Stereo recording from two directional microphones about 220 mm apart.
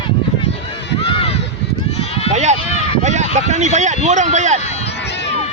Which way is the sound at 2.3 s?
30° right (ahead or behind).